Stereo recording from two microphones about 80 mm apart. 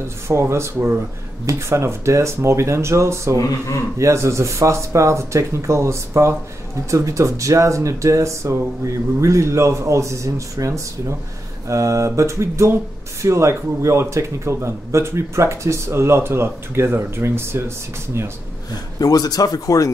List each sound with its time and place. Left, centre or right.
0.3 s a man's voice: right
3.3 s speech: left
4.0 s a man's voice: right
18.9 s speech: left